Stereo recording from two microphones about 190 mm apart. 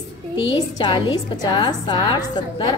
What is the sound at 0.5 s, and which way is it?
A woman's voice, 25° left (ahead or behind).